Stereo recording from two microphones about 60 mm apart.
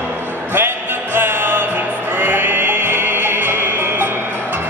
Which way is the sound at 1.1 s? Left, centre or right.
Right.